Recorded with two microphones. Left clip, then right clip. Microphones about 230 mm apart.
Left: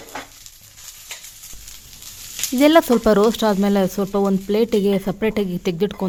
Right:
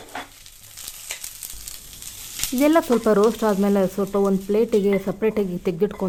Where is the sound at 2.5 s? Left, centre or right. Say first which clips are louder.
Left 4 dB; left.